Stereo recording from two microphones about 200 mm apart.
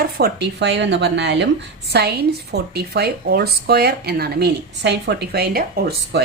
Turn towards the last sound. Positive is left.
turn(degrees=-50)  # may be behind; listen again after turning